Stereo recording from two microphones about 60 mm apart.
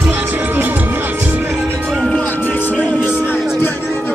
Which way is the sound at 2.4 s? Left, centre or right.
Left.